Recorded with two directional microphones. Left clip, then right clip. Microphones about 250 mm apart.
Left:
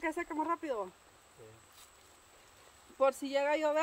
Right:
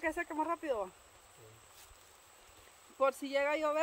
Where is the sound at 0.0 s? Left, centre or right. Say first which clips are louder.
Even; centre.